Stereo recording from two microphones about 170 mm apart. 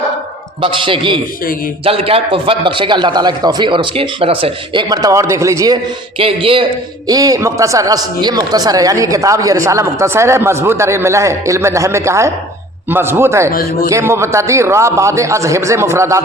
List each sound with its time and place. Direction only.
0.6 s a man's voice: 30° right (ahead or behind)
7.1 s a man's voice: 20° right (ahead or behind)
13.5 s speech: 60° left (ahead or behind)
13.9 s a man's voice: 15° right (ahead or behind)